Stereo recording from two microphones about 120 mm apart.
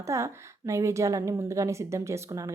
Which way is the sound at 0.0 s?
25° right (ahead or behind).